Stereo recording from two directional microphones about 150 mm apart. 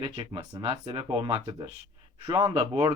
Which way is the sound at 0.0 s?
35° right (ahead or behind).